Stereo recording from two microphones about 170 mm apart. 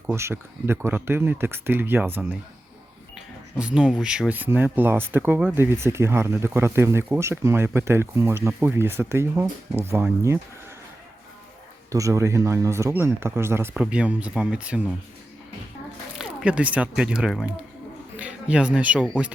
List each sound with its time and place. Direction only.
0.1 s speech: 15° right (ahead or behind)
3.6 s speech: 5° right (ahead or behind)
11.9 s speech: 20° right (ahead or behind)
16.1 s speech: 5° right (ahead or behind)